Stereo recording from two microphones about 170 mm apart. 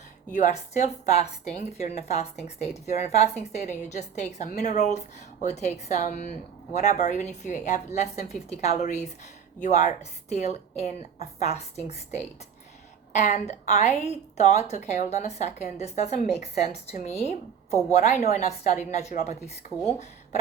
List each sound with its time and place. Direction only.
0.3 s a woman's voice: 45° left (ahead or behind)